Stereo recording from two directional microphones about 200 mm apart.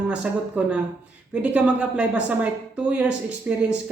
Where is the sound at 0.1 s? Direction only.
5° right (ahead or behind).